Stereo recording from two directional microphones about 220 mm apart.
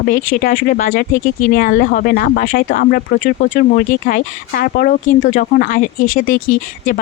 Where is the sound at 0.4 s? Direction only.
40° left (ahead or behind).